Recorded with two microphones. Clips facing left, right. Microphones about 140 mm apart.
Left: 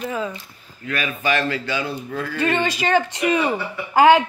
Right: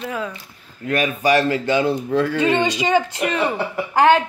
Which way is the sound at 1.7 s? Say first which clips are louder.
Right 8 dB; 25° right (ahead or behind).